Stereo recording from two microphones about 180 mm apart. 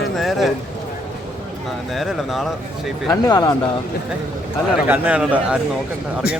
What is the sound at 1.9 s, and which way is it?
Speech, centre (ahead or behind).